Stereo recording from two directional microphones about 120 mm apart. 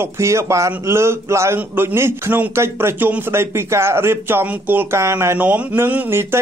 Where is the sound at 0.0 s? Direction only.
25° right (ahead or behind).